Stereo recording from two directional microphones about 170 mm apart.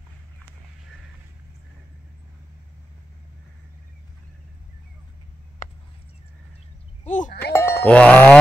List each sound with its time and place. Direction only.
7.1 s speech: 45° left (ahead or behind)
7.5 s cowbell: 15° left (ahead or behind)